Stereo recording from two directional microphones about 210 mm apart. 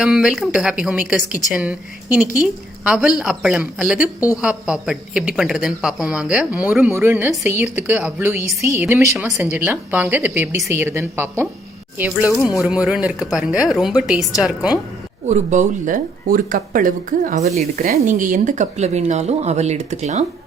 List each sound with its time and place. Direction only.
0.0 s a woman's voice: 5° right (ahead or behind)
15.3 s speech: 35° right (ahead or behind)